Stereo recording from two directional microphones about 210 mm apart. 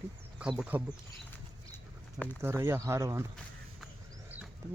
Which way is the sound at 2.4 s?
10° right (ahead or behind).